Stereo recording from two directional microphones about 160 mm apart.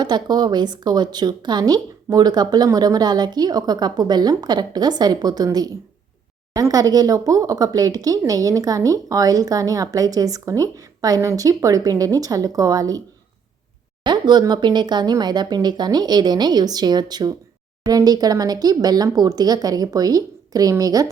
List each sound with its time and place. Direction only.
0.0 s speech: 25° right (ahead or behind)
14.0 s speech: 25° right (ahead or behind)